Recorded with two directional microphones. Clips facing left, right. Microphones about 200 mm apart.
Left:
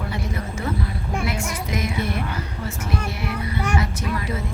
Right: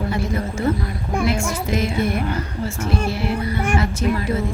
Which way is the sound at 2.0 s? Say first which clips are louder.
Right 5 dB; 50° right (ahead or behind).